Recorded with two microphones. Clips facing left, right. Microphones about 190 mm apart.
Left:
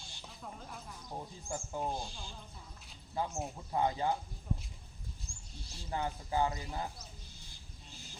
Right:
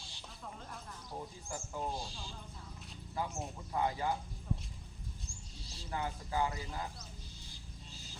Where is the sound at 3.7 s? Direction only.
20° left (ahead or behind).